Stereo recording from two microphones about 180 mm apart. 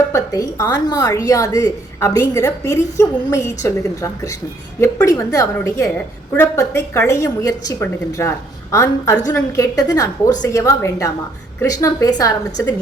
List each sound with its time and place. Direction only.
0.1 s a woman's voice: 20° left (ahead or behind)